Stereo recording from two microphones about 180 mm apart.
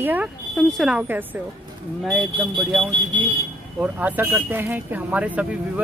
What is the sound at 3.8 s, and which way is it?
Speech, 10° right (ahead or behind).